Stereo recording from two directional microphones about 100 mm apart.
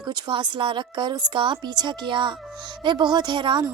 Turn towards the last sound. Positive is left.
turn(degrees=-50)  # may be behind; listen again after turning